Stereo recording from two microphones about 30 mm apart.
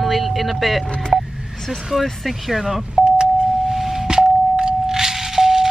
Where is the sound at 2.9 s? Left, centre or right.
Right.